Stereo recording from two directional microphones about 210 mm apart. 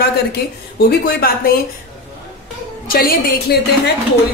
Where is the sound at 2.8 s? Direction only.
45° left (ahead or behind).